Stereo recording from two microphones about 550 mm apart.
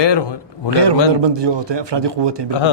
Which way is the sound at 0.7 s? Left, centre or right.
Right.